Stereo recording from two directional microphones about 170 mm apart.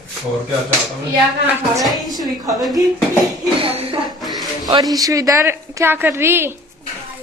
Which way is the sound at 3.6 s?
35° right (ahead or behind).